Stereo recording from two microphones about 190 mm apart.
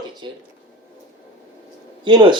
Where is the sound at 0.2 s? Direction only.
25° right (ahead or behind).